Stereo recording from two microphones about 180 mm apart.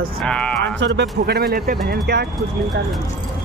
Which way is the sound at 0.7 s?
75° right (ahead or behind).